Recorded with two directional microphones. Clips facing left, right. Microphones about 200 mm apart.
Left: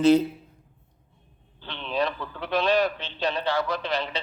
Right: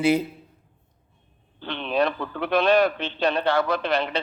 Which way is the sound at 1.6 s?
60° right (ahead or behind).